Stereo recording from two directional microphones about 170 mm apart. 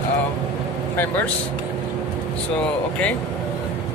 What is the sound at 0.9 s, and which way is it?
Speech, 10° left (ahead or behind).